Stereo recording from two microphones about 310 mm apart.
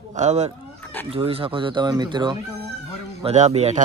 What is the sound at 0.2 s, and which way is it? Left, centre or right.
Speech, right.